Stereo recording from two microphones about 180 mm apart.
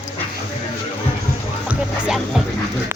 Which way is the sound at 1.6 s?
5° right (ahead or behind).